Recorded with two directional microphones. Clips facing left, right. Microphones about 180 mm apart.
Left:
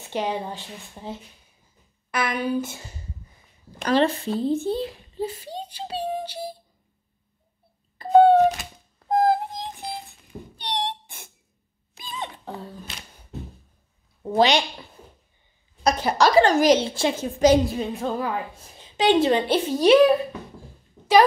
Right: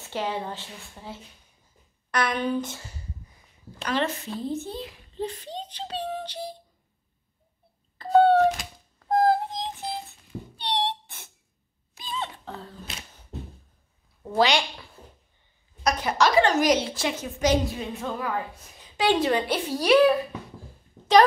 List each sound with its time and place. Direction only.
0.1 s a woman's voice: 15° left (ahead or behind)
2.0 s a woman's voice: 5° left (ahead or behind)
3.9 s a woman's voice: 30° left (ahead or behind)
5.1 s a child's voice: 10° left (ahead or behind)
8.0 s wail: 15° left (ahead or behind)
9.1 s a sound: 15° left (ahead or behind)
14.2 s a woman's voice: 20° left (ahead or behind)